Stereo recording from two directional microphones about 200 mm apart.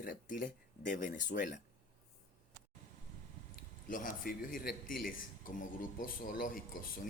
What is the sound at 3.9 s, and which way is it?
Speech, 40° left (ahead or behind).